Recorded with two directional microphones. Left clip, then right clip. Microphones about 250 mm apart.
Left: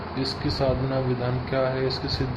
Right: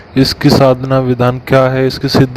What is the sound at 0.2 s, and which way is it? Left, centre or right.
Speech, right.